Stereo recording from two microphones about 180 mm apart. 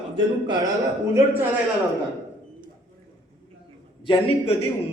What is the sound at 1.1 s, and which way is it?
Speech, 10° right (ahead or behind).